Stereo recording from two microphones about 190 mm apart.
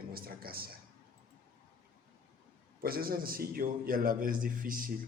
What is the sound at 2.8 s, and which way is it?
A man's voice, 50° right (ahead or behind).